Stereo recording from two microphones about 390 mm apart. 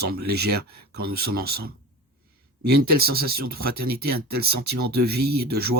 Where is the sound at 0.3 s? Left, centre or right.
Right.